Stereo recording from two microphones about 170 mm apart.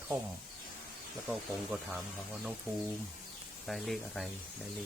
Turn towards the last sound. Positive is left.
turn(degrees=0)  # may be behind; listen again after turning